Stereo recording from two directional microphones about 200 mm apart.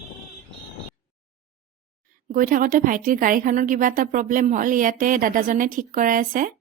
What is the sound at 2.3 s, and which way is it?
A woman's voice, 45° right (ahead or behind).